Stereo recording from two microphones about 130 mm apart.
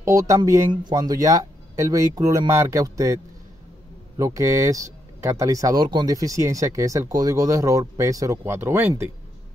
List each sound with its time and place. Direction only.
0.0 s speech: 25° right (ahead or behind)
4.2 s speech: 25° right (ahead or behind)